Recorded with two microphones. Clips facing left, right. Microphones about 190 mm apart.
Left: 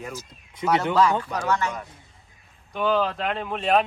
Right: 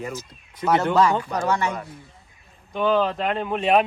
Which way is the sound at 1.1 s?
10° right (ahead or behind).